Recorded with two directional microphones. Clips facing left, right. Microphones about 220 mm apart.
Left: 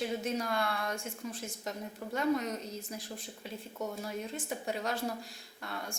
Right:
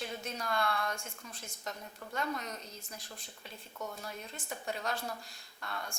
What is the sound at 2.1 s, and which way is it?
A woman's voice, 5° left (ahead or behind).